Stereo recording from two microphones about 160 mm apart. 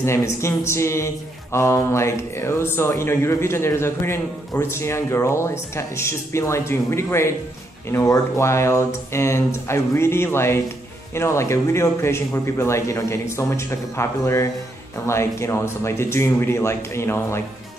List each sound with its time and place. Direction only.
0.0 s speech: 15° left (ahead or behind)